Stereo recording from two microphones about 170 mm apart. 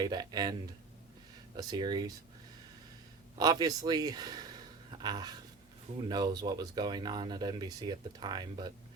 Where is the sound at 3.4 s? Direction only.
20° right (ahead or behind).